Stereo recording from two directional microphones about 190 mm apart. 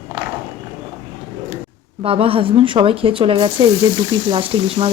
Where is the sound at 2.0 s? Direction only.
30° right (ahead or behind).